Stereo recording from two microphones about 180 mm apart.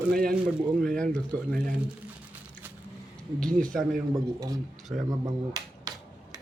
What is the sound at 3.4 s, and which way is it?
Speech, 5° left (ahead or behind).